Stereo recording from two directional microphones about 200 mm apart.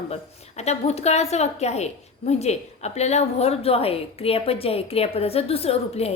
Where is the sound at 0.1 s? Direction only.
35° left (ahead or behind).